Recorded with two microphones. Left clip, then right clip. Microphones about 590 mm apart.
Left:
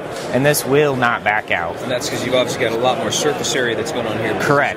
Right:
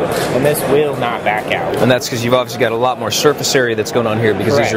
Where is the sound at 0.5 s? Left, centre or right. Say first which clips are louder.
Left 1 dB; left.